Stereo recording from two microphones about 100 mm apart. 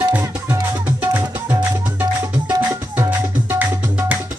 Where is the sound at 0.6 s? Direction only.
35° right (ahead or behind).